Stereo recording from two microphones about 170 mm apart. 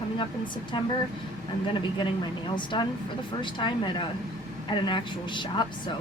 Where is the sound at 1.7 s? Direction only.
30° left (ahead or behind).